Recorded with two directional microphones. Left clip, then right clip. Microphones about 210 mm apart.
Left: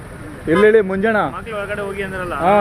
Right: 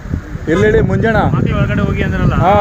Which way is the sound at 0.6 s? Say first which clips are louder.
Even; 10° right (ahead or behind).